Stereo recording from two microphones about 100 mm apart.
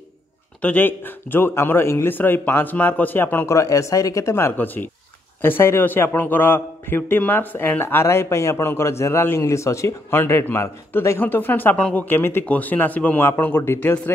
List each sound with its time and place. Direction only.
0.6 s a man's voice: 15° left (ahead or behind)
3.5 s a man's voice: 30° left (ahead or behind)